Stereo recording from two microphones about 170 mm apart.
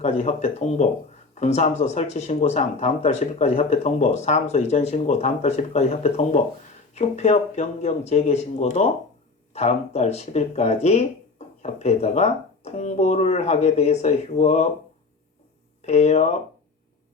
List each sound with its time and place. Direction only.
0.0 s speech: 40° left (ahead or behind)
15.8 s speech: 40° left (ahead or behind)